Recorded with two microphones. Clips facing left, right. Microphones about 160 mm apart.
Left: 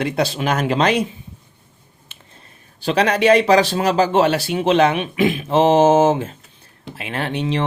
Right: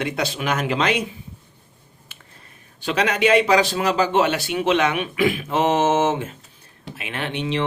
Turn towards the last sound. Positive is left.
turn(degrees=40)  # may be behind; listen again after turning